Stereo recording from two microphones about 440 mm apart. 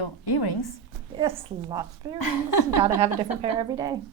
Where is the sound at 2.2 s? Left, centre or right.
Left.